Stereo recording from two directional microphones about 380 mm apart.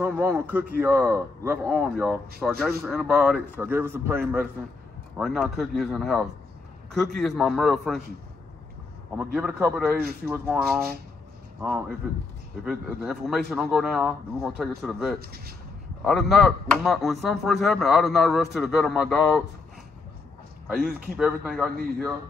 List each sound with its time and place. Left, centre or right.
0.0 s speech: centre
9.1 s speech: centre
12.6 s speech: centre
15.1 s speech: right
16.0 s speech: centre
20.8 s speech: right
21.2 s speech: centre